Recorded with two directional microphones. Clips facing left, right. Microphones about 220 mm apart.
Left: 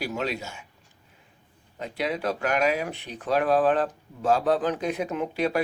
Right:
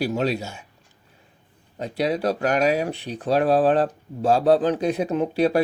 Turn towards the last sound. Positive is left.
turn(degrees=-35)  # may be behind; listen again after turning